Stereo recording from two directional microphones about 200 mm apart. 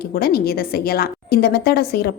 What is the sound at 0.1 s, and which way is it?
A woman's voice, 50° left (ahead or behind).